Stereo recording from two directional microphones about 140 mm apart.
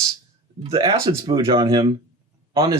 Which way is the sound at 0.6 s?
40° right (ahead or behind).